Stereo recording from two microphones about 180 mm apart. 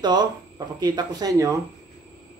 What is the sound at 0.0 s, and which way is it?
Speech, 25° right (ahead or behind).